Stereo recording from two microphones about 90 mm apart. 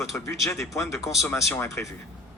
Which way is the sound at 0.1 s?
35° left (ahead or behind).